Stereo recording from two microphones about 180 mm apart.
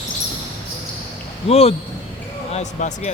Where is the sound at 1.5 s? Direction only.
35° left (ahead or behind).